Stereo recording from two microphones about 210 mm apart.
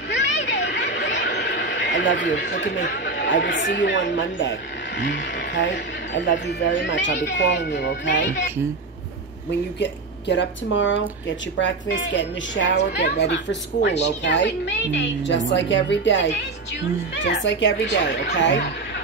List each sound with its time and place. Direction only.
0.1 s a sound: 60° left (ahead or behind)
2.8 s speech: 50° left (ahead or behind)
9.8 s speech: 55° left (ahead or behind)